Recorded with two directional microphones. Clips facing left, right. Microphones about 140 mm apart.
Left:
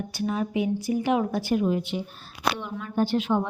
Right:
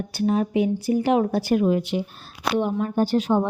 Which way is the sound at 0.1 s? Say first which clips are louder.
Right 7 dB; 40° right (ahead or behind).